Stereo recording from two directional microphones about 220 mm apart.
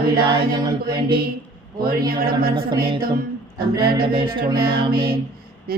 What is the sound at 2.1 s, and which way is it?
Speech, 40° right (ahead or behind).